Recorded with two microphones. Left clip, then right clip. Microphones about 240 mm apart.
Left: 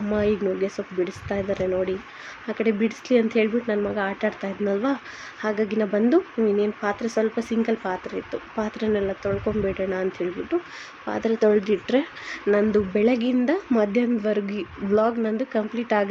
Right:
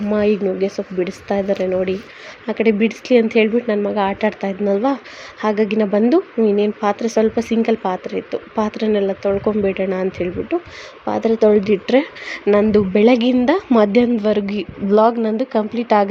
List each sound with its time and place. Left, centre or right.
0.1 s speech: centre